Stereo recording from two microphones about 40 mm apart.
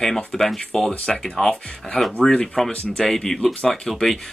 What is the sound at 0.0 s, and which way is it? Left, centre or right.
Speech, centre.